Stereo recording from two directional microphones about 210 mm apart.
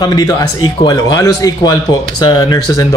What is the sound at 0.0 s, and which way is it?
A man's voice, 20° left (ahead or behind).